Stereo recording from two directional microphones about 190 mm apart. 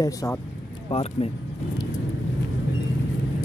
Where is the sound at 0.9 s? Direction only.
30° left (ahead or behind).